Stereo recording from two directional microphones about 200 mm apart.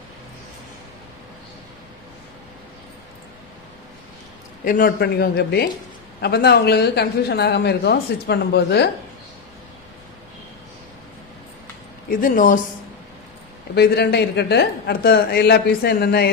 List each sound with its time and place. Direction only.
4.6 s speech: 45° left (ahead or behind)
12.0 s speech: 45° left (ahead or behind)
13.7 s speech: 55° left (ahead or behind)